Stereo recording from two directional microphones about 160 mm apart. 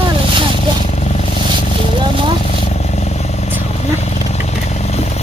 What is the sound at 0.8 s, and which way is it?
Vehicle, 45° left (ahead or behind).